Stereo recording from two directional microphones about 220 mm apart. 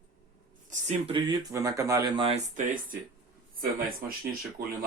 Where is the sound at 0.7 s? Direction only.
30° right (ahead or behind).